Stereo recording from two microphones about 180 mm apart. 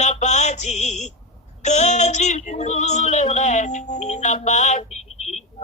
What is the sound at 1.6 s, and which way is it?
Female singing, 40° left (ahead or behind).